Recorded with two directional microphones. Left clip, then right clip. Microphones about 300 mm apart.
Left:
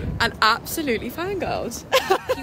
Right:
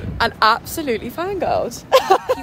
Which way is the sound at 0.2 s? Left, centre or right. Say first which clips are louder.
Right 4 dB; centre.